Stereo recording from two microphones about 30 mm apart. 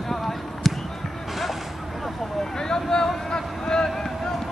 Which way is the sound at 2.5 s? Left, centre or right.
Left.